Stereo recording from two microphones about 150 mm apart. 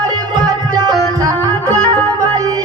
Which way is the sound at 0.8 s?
25° right (ahead or behind).